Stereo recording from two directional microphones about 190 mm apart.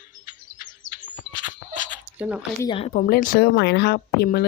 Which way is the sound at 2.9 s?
45° left (ahead or behind).